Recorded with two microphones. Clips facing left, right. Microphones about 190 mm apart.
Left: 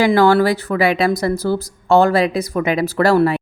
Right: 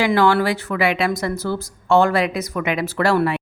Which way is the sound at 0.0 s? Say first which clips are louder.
Left 4 dB; 40° left (ahead or behind).